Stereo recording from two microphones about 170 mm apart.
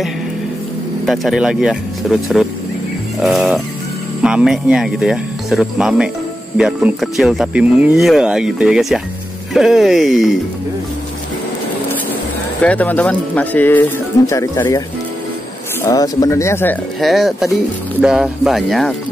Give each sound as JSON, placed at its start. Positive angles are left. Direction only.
{"t": 1.0, "sound": "speech", "side_deg": 0}
{"t": 12.6, "sound": "speech", "side_deg": 10}
{"t": 15.8, "sound": "speech", "side_deg": 20}
{"t": 17.0, "sound": "speech", "side_deg": 0}